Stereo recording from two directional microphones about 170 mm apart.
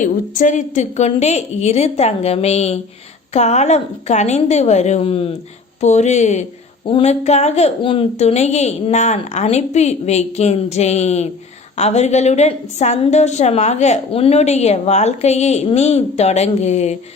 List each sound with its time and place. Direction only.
0.0 s a woman's voice: 50° left (ahead or behind)